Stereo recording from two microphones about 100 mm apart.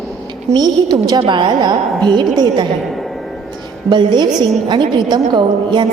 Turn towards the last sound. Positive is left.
turn(degrees=-50)  # may be behind; listen again after turning